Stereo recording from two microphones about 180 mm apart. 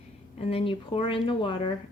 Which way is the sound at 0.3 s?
30° left (ahead or behind).